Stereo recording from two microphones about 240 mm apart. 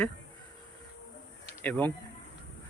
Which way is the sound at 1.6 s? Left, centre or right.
Centre.